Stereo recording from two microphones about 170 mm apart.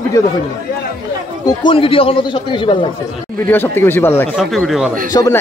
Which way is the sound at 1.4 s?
30° left (ahead or behind).